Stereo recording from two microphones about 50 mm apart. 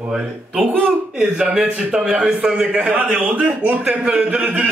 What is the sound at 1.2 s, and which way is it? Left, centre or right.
A man's voice, centre.